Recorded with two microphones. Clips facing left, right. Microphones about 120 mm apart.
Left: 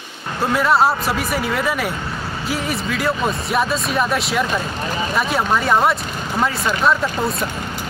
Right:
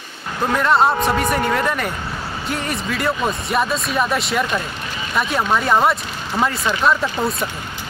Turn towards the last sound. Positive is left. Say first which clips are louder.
# even
turn(degrees=0)  # may be behind; listen again after turning